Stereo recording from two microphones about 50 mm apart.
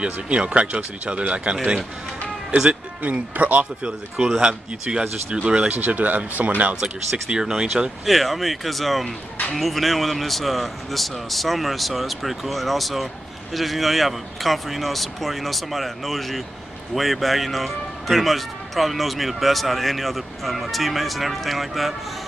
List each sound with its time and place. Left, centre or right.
0.0 s speech: right
3.0 s speech: right
4.4 s speech: centre
6.8 s speech: centre